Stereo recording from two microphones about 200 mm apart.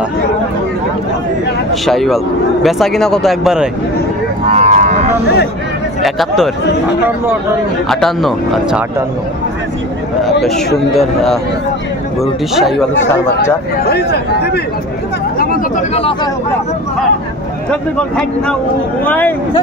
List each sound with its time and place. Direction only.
1.7 s a man's voice: centre (ahead or behind)
4.5 s a sound: 35° right (ahead or behind)
6.0 s a man's voice: centre (ahead or behind)
7.9 s a man's voice: centre (ahead or behind)
12.2 s a man's voice: centre (ahead or behind)
13.8 s speech: 55° left (ahead or behind)
15.9 s speech: 30° left (ahead or behind)
17.6 s a man's voice: 5° left (ahead or behind)